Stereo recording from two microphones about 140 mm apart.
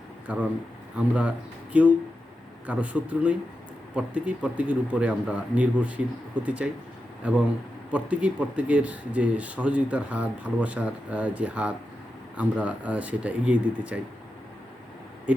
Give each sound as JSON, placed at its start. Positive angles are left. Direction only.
{"t": 0.3, "sound": "speech", "side_deg": -10}
{"t": 15.3, "sound": "speech", "side_deg": -10}